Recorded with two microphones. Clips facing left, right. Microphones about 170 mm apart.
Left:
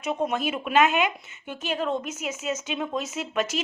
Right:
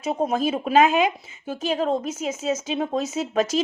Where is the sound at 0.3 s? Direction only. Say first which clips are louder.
Right 5 dB; 35° right (ahead or behind).